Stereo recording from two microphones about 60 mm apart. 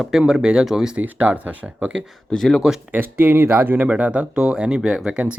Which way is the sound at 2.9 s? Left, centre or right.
Right.